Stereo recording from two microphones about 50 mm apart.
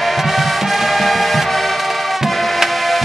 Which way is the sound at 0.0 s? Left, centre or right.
Centre.